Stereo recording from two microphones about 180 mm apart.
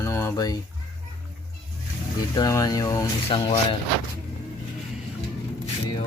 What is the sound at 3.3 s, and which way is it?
Speech, 30° left (ahead or behind).